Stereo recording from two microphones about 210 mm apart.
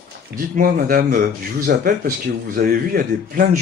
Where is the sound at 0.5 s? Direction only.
45° right (ahead or behind).